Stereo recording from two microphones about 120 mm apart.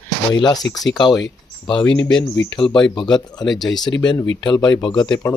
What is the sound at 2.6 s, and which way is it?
Speech, 40° left (ahead or behind).